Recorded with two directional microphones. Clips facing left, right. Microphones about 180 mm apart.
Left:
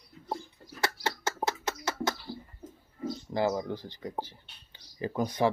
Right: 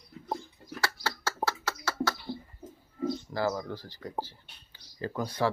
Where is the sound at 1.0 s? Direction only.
20° left (ahead or behind).